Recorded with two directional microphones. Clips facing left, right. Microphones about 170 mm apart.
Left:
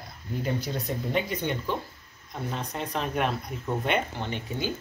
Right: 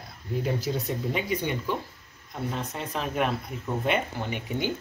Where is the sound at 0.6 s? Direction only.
5° right (ahead or behind).